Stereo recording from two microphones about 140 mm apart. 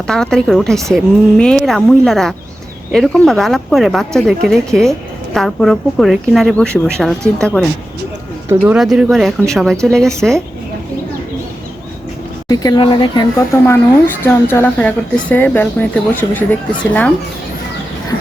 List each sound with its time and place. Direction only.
0.1 s speech: 5° left (ahead or behind)
12.5 s speech: 25° left (ahead or behind)
13.5 s speech: 15° left (ahead or behind)